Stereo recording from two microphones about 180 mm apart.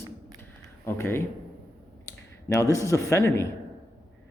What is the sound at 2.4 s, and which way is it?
A man's voice, 15° left (ahead or behind).